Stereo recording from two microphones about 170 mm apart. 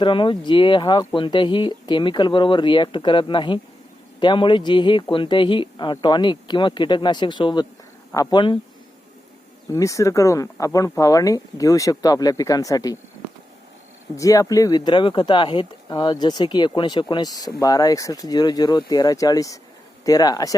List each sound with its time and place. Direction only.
0.0 s speech: 30° left (ahead or behind)
9.7 s speech: 20° left (ahead or behind)
14.2 s speech: 20° left (ahead or behind)